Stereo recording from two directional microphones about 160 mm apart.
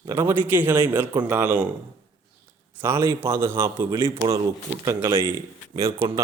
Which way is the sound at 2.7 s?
15° right (ahead or behind).